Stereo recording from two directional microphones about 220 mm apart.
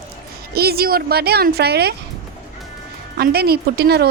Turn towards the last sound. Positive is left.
turn(degrees=-50)  # may be behind; listen again after turning